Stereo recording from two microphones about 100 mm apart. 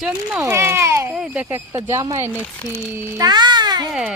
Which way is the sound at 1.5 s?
30° right (ahead or behind).